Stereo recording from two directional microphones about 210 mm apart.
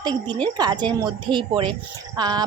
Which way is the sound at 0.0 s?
20° right (ahead or behind).